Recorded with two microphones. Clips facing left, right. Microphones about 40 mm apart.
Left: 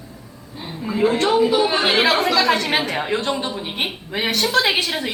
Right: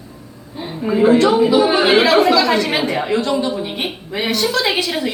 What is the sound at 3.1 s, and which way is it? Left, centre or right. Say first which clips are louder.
Speech: right 5 dB; left.